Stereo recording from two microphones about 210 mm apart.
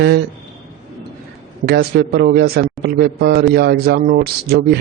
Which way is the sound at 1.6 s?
50° right (ahead or behind).